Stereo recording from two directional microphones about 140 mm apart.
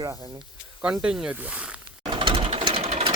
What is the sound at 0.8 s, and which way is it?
Speech, 5° right (ahead or behind).